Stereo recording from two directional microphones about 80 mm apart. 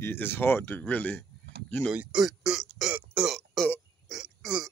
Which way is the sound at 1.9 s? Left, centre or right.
Centre.